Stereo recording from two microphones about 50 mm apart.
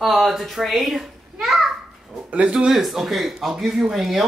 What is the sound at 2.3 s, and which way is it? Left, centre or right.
Speech, right.